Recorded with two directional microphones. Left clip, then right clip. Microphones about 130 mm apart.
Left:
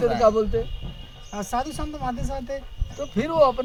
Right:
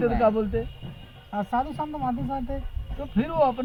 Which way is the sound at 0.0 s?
20° left (ahead or behind).